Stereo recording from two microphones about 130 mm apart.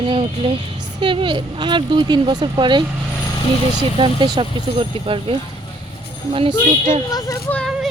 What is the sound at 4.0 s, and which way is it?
Speech, 40° right (ahead or behind).